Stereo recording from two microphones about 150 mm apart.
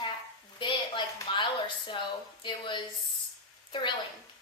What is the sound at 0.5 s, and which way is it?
A woman's voice, 30° left (ahead or behind).